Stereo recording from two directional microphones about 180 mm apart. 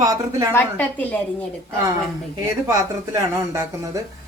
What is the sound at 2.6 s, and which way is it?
A woman's voice, 20° right (ahead or behind).